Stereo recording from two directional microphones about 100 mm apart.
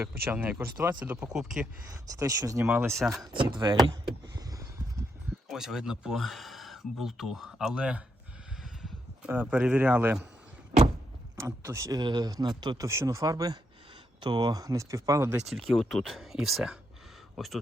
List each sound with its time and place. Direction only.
0.0 s a man's voice: 20° right (ahead or behind)
1.9 s speech: 35° right (ahead or behind)
3.3 s speech: 50° right (ahead or behind)
5.5 s speech: 5° right (ahead or behind)
9.3 s a man's voice: 15° right (ahead or behind)
11.3 s speech: 25° right (ahead or behind)
11.9 s speech: 45° right (ahead or behind)
12.9 s speech: 30° right (ahead or behind)
15.4 s speech: centre (ahead or behind)